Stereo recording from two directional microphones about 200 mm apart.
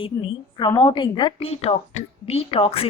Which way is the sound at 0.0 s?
25° left (ahead or behind).